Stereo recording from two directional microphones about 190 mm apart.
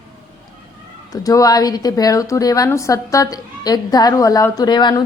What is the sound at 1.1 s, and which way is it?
A woman's voice, 20° left (ahead or behind).